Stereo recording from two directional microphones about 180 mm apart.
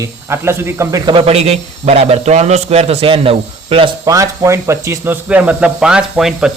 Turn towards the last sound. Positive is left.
turn(degrees=-5)  # may be behind; listen again after turning